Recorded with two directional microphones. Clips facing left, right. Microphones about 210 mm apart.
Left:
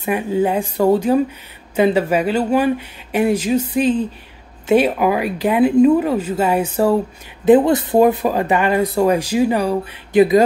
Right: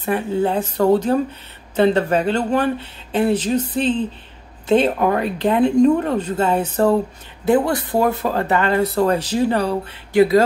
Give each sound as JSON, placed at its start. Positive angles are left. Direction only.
{"t": 0.0, "sound": "speech", "side_deg": 10}
{"t": 7.4, "sound": "speech", "side_deg": 20}